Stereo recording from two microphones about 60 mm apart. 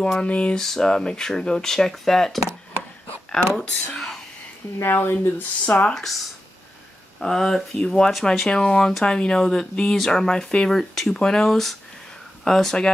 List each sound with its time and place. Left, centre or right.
0.0 s speech: centre
3.5 s speech: centre
4.8 s speech: left
5.7 s speech: left
7.2 s speech: centre